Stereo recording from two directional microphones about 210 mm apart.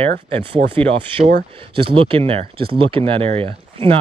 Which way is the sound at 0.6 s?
55° right (ahead or behind).